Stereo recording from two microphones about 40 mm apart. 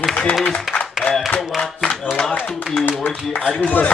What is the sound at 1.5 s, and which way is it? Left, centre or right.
Speech, centre.